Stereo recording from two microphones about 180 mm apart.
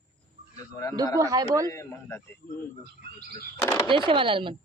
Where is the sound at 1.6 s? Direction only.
15° left (ahead or behind).